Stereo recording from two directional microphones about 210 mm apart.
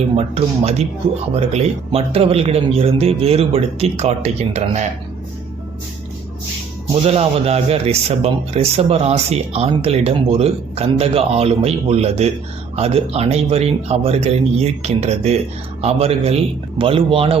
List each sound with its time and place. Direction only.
0.2 s speech: 30° right (ahead or behind)
7.0 s speech: 30° right (ahead or behind)